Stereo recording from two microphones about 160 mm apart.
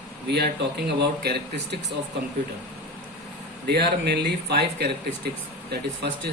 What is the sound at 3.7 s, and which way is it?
Speech, 90° right.